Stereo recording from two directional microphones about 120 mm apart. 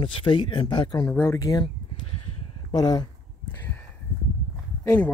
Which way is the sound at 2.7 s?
35° left (ahead or behind).